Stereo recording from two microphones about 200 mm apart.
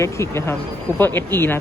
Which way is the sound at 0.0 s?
15° left (ahead or behind).